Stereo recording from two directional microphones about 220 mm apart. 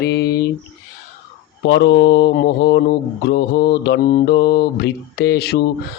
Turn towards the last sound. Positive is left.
turn(degrees=45)  # may be behind; listen again after turning